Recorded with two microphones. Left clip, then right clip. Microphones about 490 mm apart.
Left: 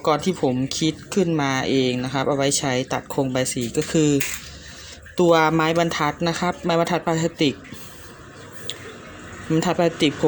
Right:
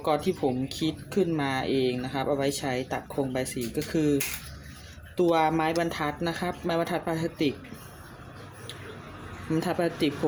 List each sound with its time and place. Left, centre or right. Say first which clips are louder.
0.0 s speech: left 6 dB; right
9.5 s speech: left 7 dB; right